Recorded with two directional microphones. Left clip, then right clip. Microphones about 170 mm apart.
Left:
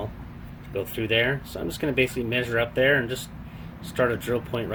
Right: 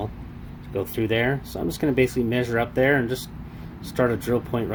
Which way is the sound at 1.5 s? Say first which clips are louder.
Right 3 dB; 30° right (ahead or behind).